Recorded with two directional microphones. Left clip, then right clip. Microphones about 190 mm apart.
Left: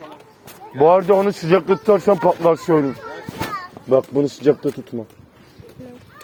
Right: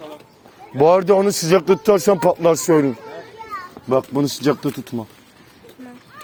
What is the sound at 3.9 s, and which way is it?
Speech, 65° right (ahead or behind).